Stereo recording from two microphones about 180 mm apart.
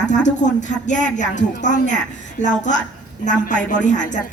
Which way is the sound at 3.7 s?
45° left (ahead or behind).